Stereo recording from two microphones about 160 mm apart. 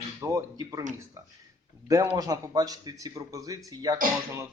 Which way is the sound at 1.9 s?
20° right (ahead or behind).